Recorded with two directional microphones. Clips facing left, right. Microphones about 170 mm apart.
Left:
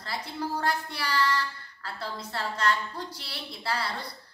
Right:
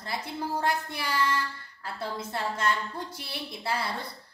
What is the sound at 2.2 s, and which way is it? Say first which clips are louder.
A woman's voice: even; 25° right (ahead or behind).